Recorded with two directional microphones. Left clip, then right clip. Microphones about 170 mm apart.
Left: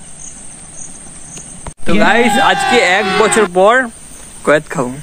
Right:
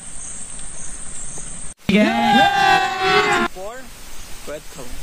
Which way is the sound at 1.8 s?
Centre (ahead or behind).